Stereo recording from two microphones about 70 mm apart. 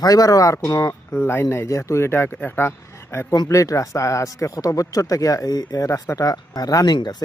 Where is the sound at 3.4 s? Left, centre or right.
Left.